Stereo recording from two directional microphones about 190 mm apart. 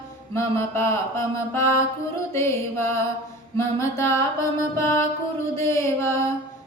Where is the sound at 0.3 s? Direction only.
15° left (ahead or behind).